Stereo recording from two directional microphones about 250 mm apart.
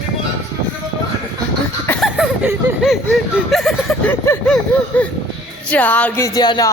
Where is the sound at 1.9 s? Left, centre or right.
Centre.